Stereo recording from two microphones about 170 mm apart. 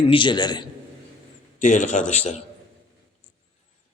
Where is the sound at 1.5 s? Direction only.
50° left (ahead or behind).